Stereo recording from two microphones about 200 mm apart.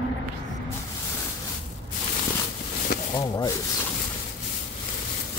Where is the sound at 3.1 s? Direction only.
20° left (ahead or behind).